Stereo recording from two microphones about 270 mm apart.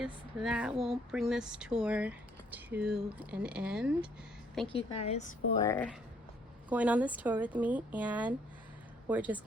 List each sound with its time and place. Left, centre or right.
0.0 s speech: centre
4.7 s a woman's voice: left
5.5 s speech: centre
6.7 s speech: centre